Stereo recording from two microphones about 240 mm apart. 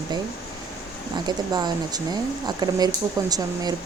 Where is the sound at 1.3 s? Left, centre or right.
Centre.